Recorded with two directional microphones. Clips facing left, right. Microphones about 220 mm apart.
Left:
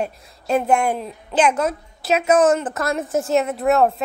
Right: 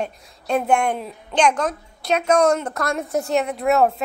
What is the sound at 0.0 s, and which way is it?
A woman's voice, centre (ahead or behind).